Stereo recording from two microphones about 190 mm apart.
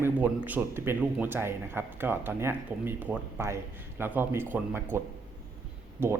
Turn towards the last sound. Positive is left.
turn(degrees=-10)  # may be behind; listen again after turning